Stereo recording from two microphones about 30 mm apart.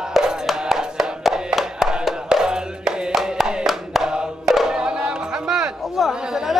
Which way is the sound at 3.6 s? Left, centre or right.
Centre.